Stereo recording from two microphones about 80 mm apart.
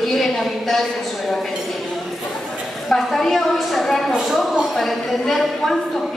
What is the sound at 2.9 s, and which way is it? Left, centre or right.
A woman's voice, centre.